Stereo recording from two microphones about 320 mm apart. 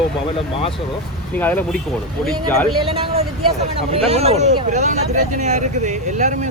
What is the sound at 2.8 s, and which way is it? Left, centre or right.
Speech, centre.